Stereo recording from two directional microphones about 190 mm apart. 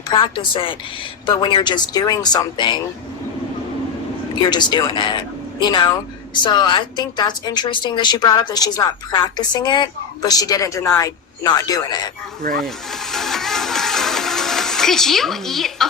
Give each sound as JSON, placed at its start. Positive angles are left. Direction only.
{"t": 0.1, "sound": "a woman's voice", "side_deg": 25}
{"t": 4.4, "sound": "a woman's voice", "side_deg": 25}
{"t": 12.5, "sound": "music", "side_deg": 0}